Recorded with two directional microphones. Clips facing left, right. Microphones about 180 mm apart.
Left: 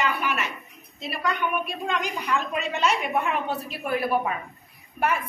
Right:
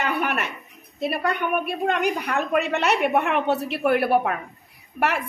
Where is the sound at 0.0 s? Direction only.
55° right (ahead or behind).